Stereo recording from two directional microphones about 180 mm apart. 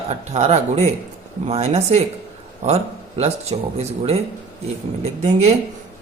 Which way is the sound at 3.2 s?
35° right (ahead or behind).